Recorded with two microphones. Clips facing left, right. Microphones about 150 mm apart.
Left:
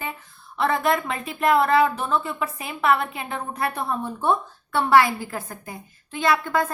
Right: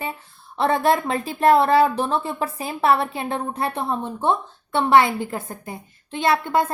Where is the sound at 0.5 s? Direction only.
30° right (ahead or behind).